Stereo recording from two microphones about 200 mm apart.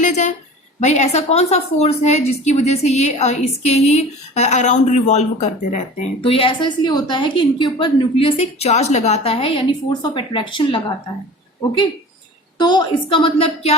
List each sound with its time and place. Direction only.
0.0 s a sound: 35° left (ahead or behind)
0.8 s a woman's voice: 35° left (ahead or behind)
12.5 s a woman's voice: 20° left (ahead or behind)